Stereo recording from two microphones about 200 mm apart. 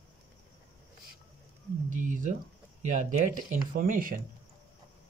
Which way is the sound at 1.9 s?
40° right (ahead or behind).